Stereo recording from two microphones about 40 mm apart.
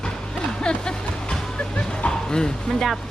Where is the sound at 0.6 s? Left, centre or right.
Left.